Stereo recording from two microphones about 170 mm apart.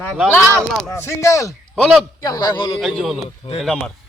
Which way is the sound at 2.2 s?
20° left (ahead or behind).